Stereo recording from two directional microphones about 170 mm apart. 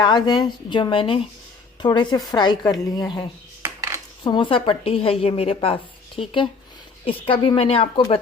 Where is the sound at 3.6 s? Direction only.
15° right (ahead or behind).